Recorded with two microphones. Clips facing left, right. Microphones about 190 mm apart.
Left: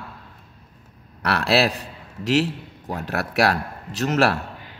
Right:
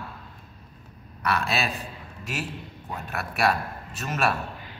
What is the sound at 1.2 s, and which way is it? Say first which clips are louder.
A man's voice: left 7 dB; 70° left (ahead or behind).